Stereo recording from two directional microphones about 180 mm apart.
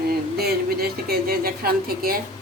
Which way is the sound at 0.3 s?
60° right (ahead or behind).